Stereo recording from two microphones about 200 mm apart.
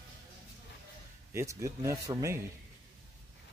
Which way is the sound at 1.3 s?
15° right (ahead or behind).